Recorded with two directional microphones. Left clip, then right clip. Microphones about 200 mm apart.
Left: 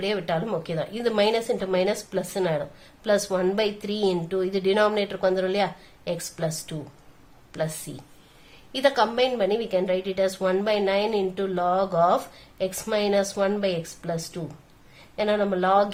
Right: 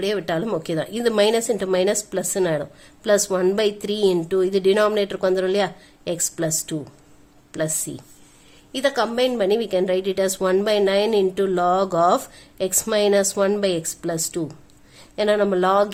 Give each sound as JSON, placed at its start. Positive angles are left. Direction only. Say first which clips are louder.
{"t": 0.0, "sound": "a woman's voice", "louder": "right 3 dB", "side_deg": -40}